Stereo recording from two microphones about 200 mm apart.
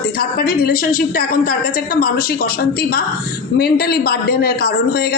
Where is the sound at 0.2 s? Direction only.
50° left (ahead or behind).